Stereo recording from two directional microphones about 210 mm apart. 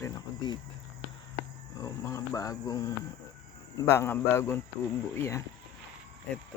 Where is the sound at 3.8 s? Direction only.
15° left (ahead or behind).